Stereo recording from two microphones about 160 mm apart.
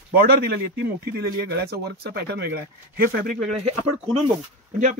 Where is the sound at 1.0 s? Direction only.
85° right.